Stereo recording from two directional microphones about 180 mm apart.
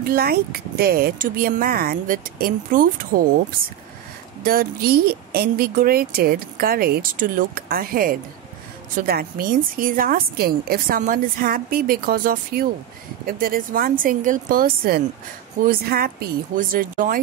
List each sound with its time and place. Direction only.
0.0 s a woman's voice: 55° right (ahead or behind)
4.4 s a woman's voice: 55° right (ahead or behind)